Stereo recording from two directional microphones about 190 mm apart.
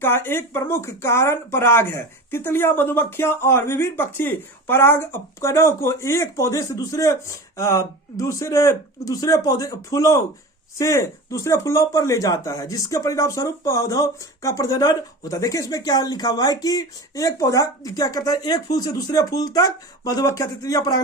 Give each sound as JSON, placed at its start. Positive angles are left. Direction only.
{"t": 0.0, "sound": "speech", "side_deg": 10}